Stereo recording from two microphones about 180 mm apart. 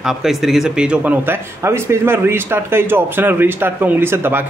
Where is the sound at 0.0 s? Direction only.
Centre (ahead or behind).